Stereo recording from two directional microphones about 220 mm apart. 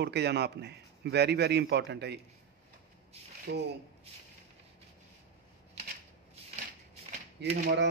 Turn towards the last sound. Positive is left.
turn(degrees=-50)  # may be behind; listen again after turning